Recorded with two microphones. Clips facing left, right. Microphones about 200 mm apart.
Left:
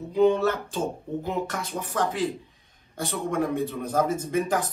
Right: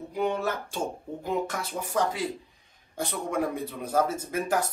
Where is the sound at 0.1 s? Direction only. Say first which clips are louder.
Left 8 dB; 10° right (ahead or behind).